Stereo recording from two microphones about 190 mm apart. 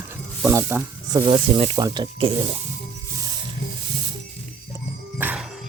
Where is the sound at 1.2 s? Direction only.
30° right (ahead or behind).